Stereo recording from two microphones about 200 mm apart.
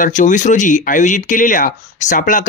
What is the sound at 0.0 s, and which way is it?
Speech, 40° left (ahead or behind).